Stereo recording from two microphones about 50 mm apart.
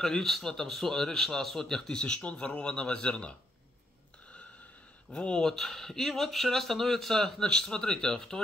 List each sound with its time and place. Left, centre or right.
0.0 s a man's voice: centre; by 3.3 s left
5.1 s a man's voice: centre